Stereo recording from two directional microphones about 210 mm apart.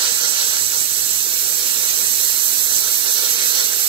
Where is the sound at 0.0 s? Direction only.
25° right (ahead or behind).